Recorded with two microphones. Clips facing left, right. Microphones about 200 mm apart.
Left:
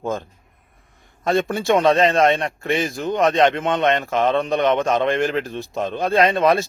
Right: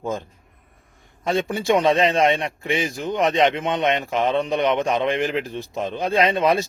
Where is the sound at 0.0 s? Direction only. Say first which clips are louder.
Left 2 dB; 15° right (ahead or behind).